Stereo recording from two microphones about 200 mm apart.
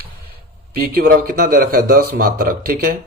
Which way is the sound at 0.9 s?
50° right (ahead or behind).